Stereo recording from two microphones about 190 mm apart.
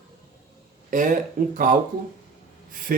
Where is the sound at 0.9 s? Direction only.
45° right (ahead or behind).